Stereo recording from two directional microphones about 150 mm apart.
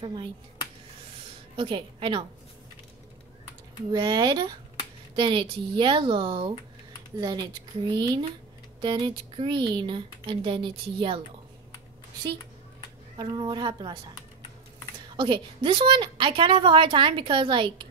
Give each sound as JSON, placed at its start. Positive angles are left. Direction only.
{"t": 0.0, "sound": "a woman's voice", "side_deg": -30}
{"t": 1.6, "sound": "a woman's voice", "side_deg": -35}
{"t": 3.9, "sound": "a woman's voice", "side_deg": -30}
{"t": 13.2, "sound": "a woman's voice", "side_deg": -30}
{"t": 15.1, "sound": "a woman's voice", "side_deg": -30}